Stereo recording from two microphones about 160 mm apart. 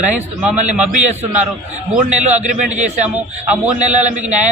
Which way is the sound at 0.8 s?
10° right (ahead or behind).